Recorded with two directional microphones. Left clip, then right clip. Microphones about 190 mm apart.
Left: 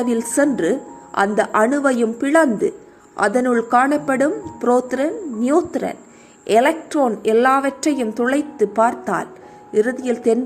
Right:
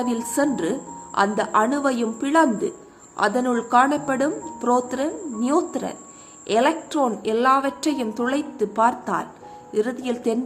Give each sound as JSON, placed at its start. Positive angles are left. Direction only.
{"t": 0.0, "sound": "speech", "side_deg": 15}